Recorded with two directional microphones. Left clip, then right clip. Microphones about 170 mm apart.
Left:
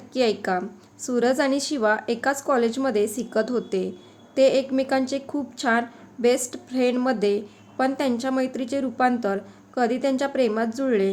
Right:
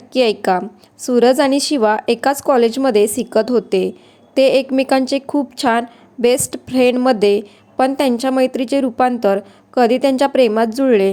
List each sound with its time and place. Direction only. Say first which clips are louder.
0.1 s a woman's voice: right 8 dB; 40° right (ahead or behind)